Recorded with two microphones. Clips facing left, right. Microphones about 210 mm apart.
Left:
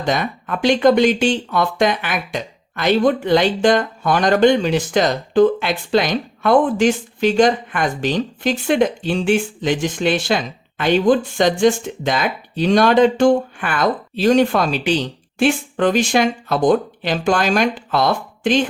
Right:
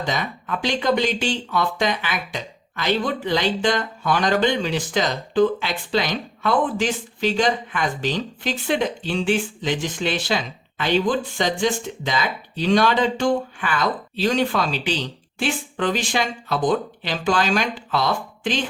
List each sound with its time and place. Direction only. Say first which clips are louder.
0.0 s speech: left 5 dB; 50° left (ahead or behind)